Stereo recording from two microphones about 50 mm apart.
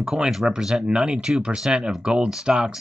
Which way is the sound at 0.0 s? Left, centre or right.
Centre.